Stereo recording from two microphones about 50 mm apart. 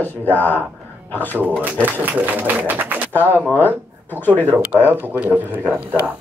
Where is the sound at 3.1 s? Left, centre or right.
Left.